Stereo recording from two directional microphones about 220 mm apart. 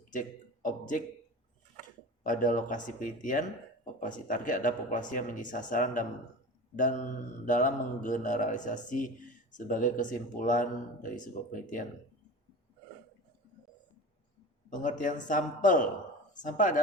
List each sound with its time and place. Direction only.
0.1 s a man's voice: 35° left (ahead or behind)
2.2 s speech: 35° left (ahead or behind)
14.7 s speech: 35° left (ahead or behind)